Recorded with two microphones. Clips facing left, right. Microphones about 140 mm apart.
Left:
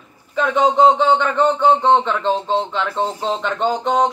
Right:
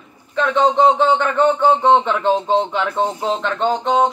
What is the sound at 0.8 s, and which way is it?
Speech, 5° right (ahead or behind).